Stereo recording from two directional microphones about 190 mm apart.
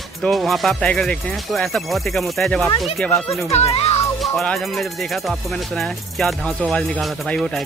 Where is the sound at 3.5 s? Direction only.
35° left (ahead or behind).